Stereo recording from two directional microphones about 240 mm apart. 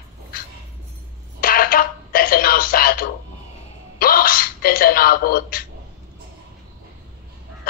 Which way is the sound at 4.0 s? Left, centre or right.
Left.